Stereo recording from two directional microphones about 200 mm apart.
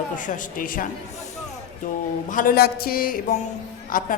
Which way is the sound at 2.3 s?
45° left (ahead or behind).